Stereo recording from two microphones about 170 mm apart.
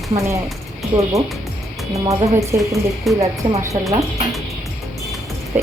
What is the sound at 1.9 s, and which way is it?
Speech, 20° right (ahead or behind).